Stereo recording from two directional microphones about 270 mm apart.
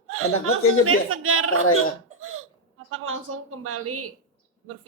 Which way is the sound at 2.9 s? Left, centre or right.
Right.